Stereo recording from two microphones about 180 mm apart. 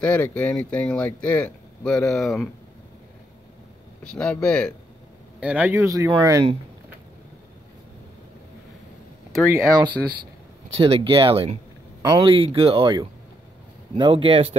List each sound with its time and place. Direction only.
0.0 s speech: 10° left (ahead or behind)
4.0 s speech: 5° left (ahead or behind)
5.4 s speech: 5° right (ahead or behind)
9.5 s speech: 25° right (ahead or behind)